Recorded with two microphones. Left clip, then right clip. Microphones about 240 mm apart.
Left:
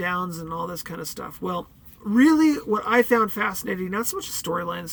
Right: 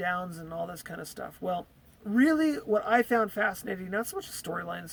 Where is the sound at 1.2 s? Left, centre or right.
Centre.